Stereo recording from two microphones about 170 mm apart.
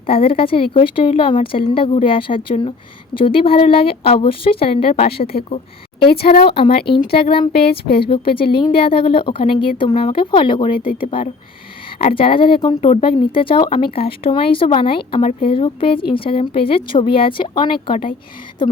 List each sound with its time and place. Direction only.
0.1 s speech: 35° left (ahead or behind)
10.7 s speech: 55° left (ahead or behind)
11.0 s speech: 30° left (ahead or behind)